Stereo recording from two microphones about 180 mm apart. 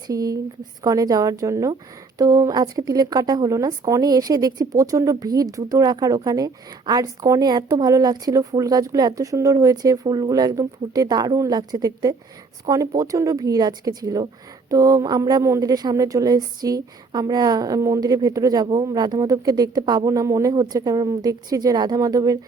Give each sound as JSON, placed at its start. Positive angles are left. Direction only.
{"t": 0.1, "sound": "speech", "side_deg": -20}